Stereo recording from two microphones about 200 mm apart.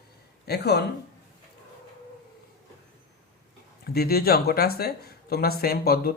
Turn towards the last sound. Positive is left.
turn(degrees=50)  # may be behind; listen again after turning